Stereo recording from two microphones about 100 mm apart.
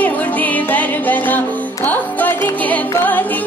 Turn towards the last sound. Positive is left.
turn(degrees=15)  # may be behind; listen again after turning